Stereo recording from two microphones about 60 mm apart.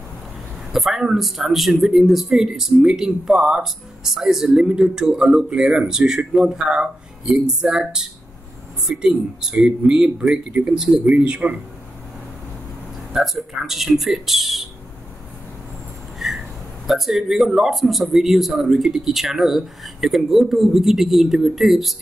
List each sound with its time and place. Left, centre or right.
0.7 s speech: centre
13.1 s speech: centre
16.2 s a sound: centre
16.8 s speech: centre